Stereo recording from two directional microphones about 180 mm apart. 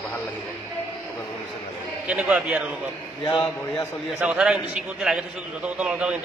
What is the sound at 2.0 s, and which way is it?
Speech, 5° right (ahead or behind).